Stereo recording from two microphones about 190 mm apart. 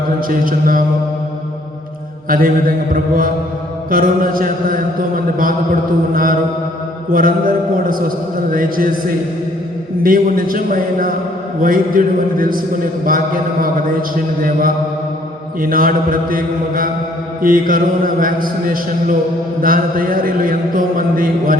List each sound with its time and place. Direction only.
0.3 s a man's voice: 45° right (ahead or behind)
2.3 s a man's voice: 50° right (ahead or behind)
10.0 s a man's voice: 50° right (ahead or behind)
15.6 s a man's voice: 50° right (ahead or behind)